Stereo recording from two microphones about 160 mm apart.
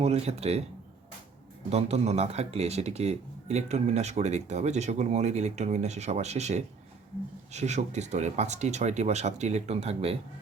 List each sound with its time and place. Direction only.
0.0 s speech: 40° right (ahead or behind)
1.7 s speech: 40° right (ahead or behind)